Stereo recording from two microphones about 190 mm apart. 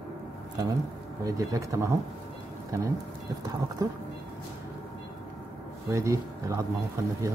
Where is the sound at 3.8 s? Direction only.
15° right (ahead or behind).